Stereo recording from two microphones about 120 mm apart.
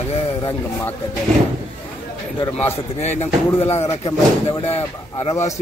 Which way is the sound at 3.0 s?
70° left (ahead or behind).